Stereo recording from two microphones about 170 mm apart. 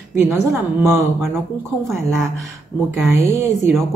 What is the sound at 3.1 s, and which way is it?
Speech, 15° right (ahead or behind).